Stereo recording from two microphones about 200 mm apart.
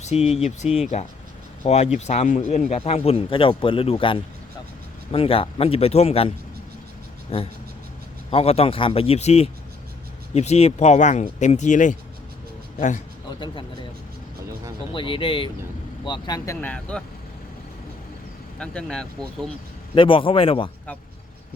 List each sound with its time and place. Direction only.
0.0 s a man's voice: 35° left (ahead or behind)
14.9 s speech: 25° left (ahead or behind)
16.6 s speech: 5° left (ahead or behind)
18.6 s speech: 5° left (ahead or behind)
20.0 s speech: 25° left (ahead or behind)